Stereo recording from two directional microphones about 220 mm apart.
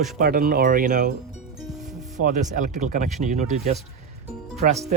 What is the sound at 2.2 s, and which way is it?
Speech, 35° right (ahead or behind).